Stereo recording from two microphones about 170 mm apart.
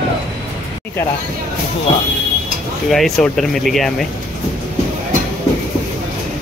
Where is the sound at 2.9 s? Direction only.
Centre (ahead or behind).